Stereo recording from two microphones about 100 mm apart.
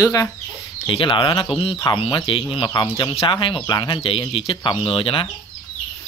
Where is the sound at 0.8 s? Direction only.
55° left (ahead or behind).